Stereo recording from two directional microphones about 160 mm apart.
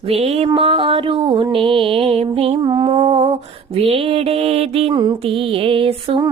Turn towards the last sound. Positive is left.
turn(degrees=-35)  # may be behind; listen again after turning